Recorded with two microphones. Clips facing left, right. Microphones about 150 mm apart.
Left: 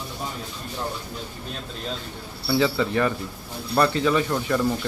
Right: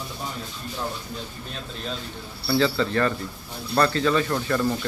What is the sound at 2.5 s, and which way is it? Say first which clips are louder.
Speech: even; 15° left (ahead or behind).